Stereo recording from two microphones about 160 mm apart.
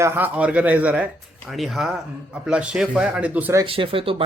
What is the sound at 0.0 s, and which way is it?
Speech, 10° right (ahead or behind).